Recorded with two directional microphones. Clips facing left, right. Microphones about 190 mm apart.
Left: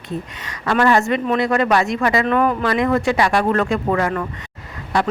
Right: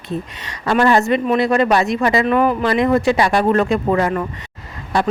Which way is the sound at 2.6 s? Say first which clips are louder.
Right 3 dB; 25° right (ahead or behind).